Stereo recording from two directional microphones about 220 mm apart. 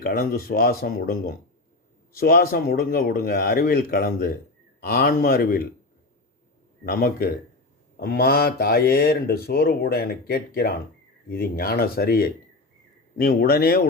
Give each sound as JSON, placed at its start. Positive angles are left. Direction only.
{"t": 0.0, "sound": "speech", "side_deg": 40}
{"t": 6.8, "sound": "speech", "side_deg": 45}